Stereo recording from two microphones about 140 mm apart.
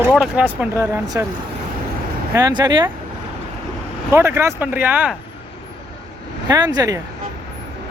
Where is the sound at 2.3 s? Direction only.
25° right (ahead or behind).